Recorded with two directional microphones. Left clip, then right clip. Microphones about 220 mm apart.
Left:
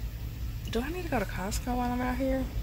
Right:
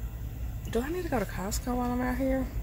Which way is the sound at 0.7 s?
15° right (ahead or behind).